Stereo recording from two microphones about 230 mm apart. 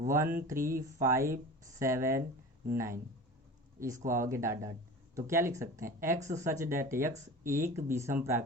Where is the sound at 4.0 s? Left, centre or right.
Right.